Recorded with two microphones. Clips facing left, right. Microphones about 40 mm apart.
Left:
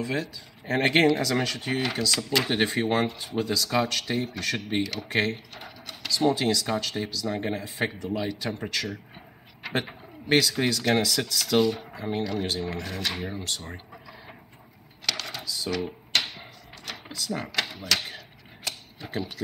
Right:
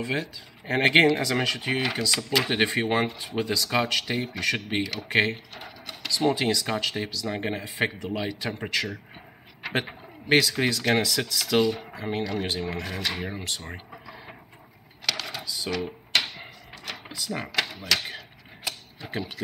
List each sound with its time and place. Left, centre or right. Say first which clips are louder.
0.0 s speech: even; centre
7.3 s speech: right 1 dB; right
7.6 s speech: right 2 dB; centre
9.6 s bird: right 1 dB; centre
10.3 s speech: right 1 dB; centre
15.0 s typewriter: right 1 dB; centre